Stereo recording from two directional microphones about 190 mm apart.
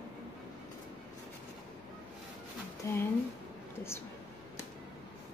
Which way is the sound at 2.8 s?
15° left (ahead or behind).